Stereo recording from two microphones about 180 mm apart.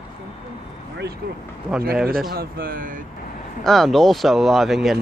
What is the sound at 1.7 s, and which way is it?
Speech, 5° right (ahead or behind).